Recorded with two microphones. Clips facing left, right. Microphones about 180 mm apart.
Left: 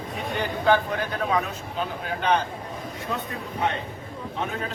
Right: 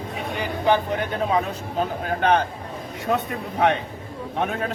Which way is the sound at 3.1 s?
75° right (ahead or behind).